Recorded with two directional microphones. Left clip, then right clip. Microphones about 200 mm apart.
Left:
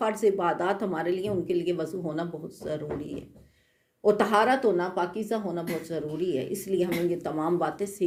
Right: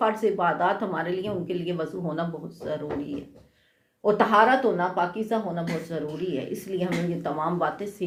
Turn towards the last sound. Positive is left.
turn(degrees=45)  # may be behind; listen again after turning